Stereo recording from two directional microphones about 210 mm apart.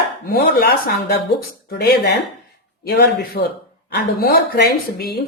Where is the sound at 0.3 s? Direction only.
45° left (ahead or behind).